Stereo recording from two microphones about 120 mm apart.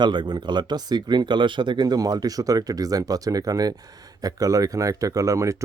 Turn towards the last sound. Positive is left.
turn(degrees=-25)  # may be behind; listen again after turning